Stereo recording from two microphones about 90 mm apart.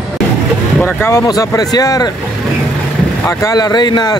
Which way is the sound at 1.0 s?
35° left (ahead or behind).